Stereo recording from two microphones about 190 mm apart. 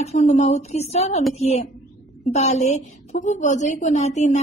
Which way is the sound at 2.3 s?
35° left (ahead or behind).